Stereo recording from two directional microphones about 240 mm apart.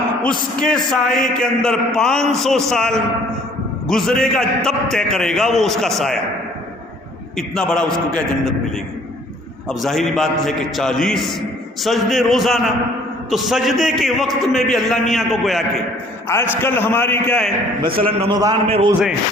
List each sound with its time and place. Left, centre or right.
0.6 s a man's voice: centre
7.3 s a man's voice: centre
9.6 s a man's voice: centre
17.8 s a man's voice: right
18.2 s a man's voice: centre
18.9 s a man's voice: centre